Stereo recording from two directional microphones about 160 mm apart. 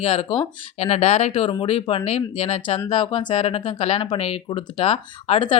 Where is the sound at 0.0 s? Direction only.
40° left (ahead or behind).